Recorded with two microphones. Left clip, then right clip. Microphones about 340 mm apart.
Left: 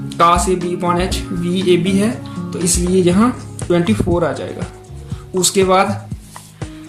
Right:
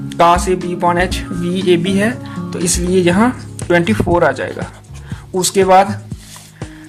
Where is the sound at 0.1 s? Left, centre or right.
Right.